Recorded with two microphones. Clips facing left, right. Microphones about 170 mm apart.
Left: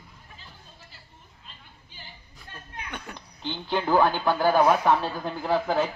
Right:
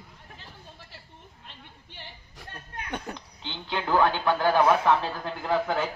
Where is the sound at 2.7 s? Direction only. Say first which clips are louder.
Right 4 dB; 40° right (ahead or behind).